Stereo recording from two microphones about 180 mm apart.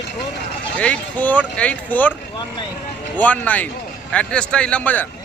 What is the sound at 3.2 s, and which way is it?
Speech, 10° left (ahead or behind).